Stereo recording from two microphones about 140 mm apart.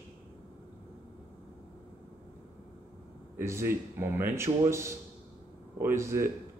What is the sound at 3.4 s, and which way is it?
A man's voice, 20° right (ahead or behind).